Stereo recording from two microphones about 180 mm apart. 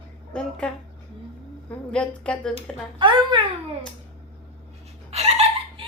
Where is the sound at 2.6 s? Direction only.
25° right (ahead or behind).